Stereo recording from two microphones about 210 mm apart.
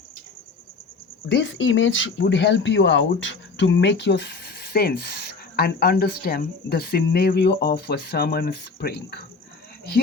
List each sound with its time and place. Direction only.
1.3 s speech: 60° left (ahead or behind)